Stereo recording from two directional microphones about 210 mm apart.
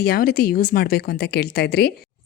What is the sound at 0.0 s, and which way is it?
A woman's voice, 45° left (ahead or behind).